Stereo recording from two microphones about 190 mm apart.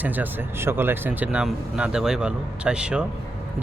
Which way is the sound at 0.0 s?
10° right (ahead or behind).